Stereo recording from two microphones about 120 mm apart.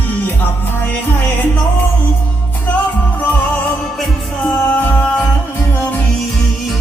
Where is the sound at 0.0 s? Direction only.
15° left (ahead or behind).